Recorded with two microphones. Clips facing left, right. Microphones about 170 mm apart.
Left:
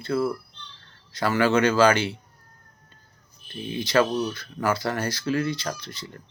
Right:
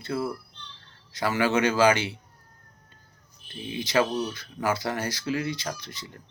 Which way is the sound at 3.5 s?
15° right (ahead or behind).